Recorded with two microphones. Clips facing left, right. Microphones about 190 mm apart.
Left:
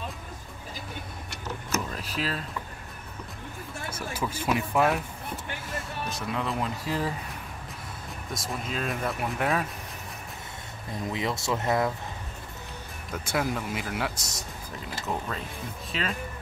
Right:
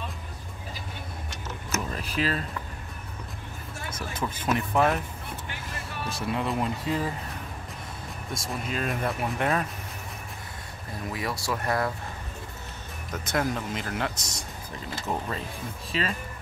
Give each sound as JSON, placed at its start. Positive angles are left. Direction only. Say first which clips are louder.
{"t": 1.7, "sound": "vehicle", "louder": "right 1 dB", "side_deg": 0}
{"t": 4.1, "sound": "speech", "louder": "even", "side_deg": 10}
{"t": 6.3, "sound": "speech", "louder": "right 2 dB", "side_deg": 0}
{"t": 8.3, "sound": "speech", "louder": "right 1 dB", "side_deg": 0}
{"t": 11.1, "sound": "speech", "louder": "left 2 dB", "side_deg": 20}
{"t": 13.3, "sound": "speech", "louder": "right 1 dB", "side_deg": 10}
{"t": 15.0, "sound": "speech", "louder": "right 1 dB", "side_deg": -5}